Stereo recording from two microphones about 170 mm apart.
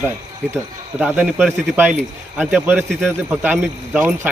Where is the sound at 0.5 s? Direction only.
10° right (ahead or behind).